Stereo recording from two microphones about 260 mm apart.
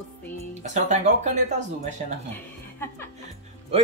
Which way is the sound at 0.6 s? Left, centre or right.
Right.